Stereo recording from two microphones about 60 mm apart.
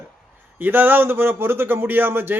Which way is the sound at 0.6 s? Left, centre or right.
Right.